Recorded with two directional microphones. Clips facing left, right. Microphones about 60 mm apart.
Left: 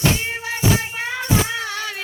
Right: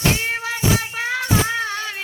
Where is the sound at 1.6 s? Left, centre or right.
Right.